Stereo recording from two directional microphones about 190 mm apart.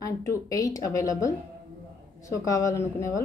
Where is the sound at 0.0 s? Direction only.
15° left (ahead or behind).